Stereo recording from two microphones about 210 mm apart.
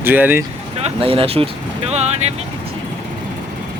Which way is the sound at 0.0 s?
10° right (ahead or behind).